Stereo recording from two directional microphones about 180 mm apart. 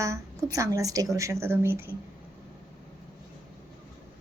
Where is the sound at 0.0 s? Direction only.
15° right (ahead or behind).